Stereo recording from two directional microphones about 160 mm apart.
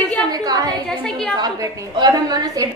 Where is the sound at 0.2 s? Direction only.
20° right (ahead or behind).